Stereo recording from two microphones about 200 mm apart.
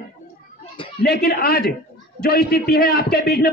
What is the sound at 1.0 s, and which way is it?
A man's voice, 50° left (ahead or behind).